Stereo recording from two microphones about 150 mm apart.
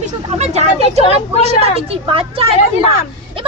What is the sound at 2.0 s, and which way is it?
Speech, 40° right (ahead or behind).